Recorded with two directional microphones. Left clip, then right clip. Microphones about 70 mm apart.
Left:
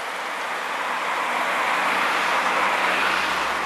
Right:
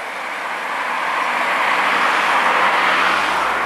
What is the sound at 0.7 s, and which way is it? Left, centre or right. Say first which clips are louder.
Vehicle: right 6 dB; centre.